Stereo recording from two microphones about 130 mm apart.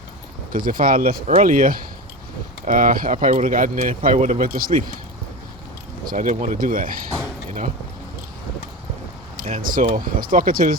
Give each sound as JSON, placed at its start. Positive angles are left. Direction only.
{"t": 0.5, "sound": "speech", "side_deg": -90}
{"t": 6.1, "sound": "speech", "side_deg": -80}
{"t": 9.4, "sound": "speech", "side_deg": -90}